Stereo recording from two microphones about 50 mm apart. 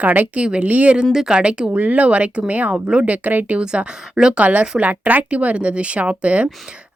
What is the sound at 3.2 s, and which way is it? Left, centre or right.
Speech, right.